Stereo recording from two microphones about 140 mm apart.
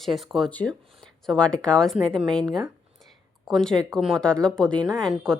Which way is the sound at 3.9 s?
5° left (ahead or behind).